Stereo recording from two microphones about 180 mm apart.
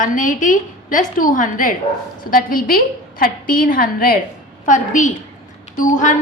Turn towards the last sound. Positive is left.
turn(degrees=45)  # may be behind; listen again after turning